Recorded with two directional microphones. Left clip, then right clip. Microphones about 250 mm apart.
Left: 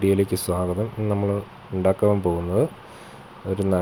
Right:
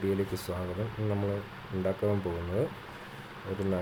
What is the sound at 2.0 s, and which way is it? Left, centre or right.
Speech, left.